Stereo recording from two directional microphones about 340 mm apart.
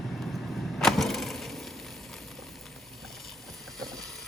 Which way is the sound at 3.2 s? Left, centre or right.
Centre.